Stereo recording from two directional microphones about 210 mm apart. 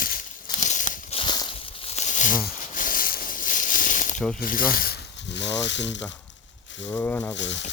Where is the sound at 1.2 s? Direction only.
20° left (ahead or behind); by 4.2 s 40° left (ahead or behind).